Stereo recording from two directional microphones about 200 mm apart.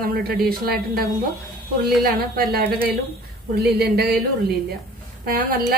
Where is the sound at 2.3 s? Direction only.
50° right (ahead or behind).